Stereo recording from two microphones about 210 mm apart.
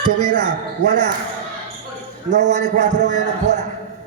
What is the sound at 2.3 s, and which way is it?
A man's voice, 35° right (ahead or behind).